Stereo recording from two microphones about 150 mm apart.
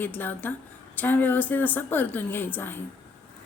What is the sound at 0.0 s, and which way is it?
A woman's voice, 10° left (ahead or behind).